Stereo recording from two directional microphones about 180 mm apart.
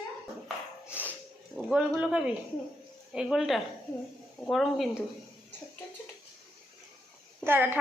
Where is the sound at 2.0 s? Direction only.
5° right (ahead or behind).